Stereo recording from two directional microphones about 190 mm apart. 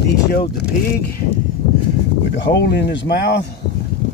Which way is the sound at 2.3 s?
65° left (ahead or behind).